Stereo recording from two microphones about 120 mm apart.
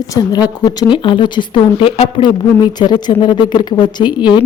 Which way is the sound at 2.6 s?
35° left (ahead or behind).